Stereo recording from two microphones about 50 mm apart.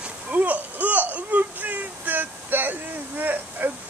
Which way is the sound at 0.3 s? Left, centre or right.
Right.